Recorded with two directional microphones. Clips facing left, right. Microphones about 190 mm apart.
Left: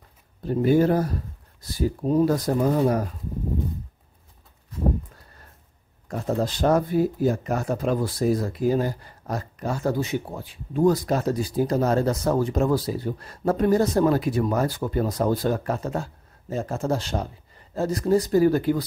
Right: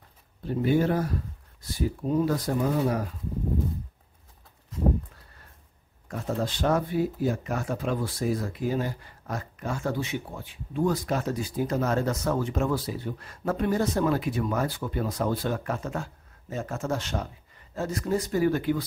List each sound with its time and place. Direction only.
0.5 s speech: 40° left (ahead or behind)
6.0 s speech: 35° left (ahead or behind)